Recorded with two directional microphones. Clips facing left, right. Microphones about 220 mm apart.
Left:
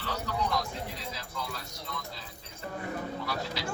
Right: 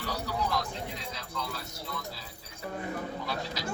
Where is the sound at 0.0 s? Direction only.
10° right (ahead or behind).